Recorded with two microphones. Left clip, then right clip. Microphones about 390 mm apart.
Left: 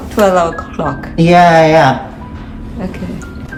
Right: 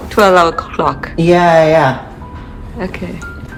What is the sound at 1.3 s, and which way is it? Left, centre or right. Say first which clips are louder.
Speech: left 2 dB; centre.